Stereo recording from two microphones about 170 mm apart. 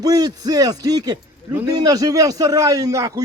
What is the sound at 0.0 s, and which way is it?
A man's voice, 20° right (ahead or behind).